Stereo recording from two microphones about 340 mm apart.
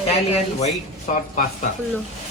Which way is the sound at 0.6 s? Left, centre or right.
Left.